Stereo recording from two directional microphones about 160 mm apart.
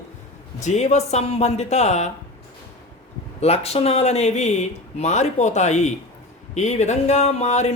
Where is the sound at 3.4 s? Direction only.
40° left (ahead or behind).